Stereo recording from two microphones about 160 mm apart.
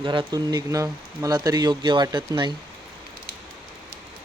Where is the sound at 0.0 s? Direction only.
30° right (ahead or behind).